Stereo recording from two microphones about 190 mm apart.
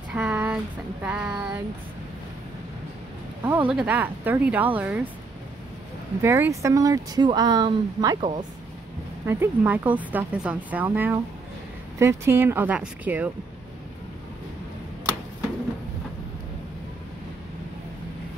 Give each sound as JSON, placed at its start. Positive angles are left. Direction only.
{"t": 0.1, "sound": "a sound", "side_deg": -5}
{"t": 1.0, "sound": "speech", "side_deg": -5}
{"t": 3.4, "sound": "speech", "side_deg": -10}
{"t": 6.2, "sound": "speech", "side_deg": -15}